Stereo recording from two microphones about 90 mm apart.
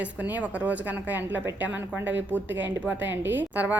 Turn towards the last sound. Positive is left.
turn(degrees=-20)  # may be behind; listen again after turning